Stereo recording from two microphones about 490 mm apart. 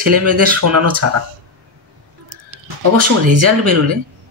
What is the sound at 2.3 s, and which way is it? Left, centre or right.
Speech, right.